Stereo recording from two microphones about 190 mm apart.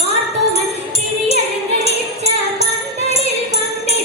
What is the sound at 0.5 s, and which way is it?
Music, 35° right (ahead or behind).